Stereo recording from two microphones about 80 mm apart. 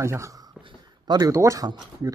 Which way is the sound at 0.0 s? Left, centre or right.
Right.